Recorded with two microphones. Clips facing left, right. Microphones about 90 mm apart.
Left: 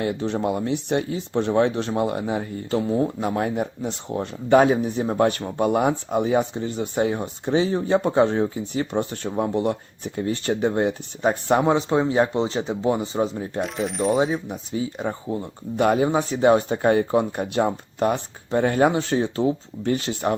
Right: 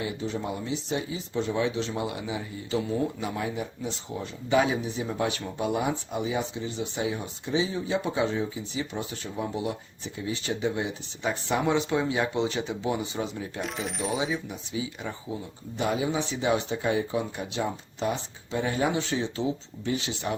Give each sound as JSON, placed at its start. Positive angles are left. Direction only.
{"t": 0.0, "sound": "speech", "side_deg": 60}
{"t": 2.9, "sound": "speech", "side_deg": 45}
{"t": 11.6, "sound": "speech", "side_deg": 35}
{"t": 13.6, "sound": "coin", "side_deg": 0}
{"t": 14.2, "sound": "speech", "side_deg": 45}